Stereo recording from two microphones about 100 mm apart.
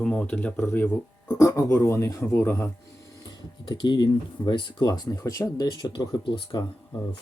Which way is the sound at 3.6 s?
45° left (ahead or behind).